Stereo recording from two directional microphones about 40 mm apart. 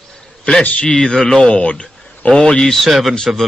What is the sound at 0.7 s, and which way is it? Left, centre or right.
Speech, left.